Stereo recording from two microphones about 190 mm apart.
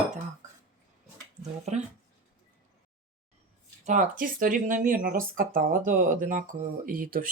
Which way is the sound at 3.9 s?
40° right (ahead or behind).